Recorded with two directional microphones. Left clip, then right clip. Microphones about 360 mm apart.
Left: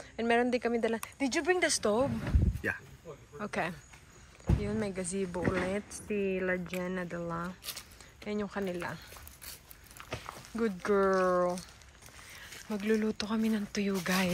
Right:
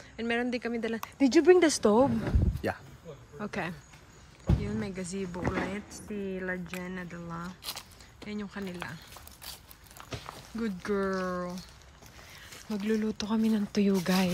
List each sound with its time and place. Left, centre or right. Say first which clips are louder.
0.1 s speech: left 3 dB; centre; by 2.8 s right
3.3 s speech: left 1 dB; centre
10.2 s speech: left 4 dB; centre
12.6 s speech: even; centre